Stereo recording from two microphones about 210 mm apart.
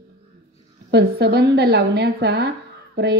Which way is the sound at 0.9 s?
50° right (ahead or behind).